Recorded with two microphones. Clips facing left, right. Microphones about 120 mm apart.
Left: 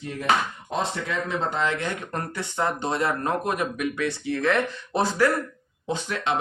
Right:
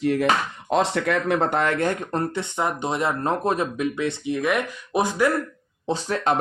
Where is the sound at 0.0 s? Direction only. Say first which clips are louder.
Right 4 dB; 75° right (ahead or behind); by 2.0 s 45° right (ahead or behind).